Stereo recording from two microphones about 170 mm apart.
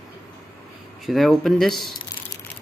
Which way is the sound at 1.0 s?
Centre (ahead or behind).